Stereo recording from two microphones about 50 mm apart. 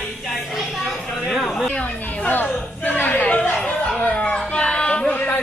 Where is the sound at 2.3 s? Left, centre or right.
Left.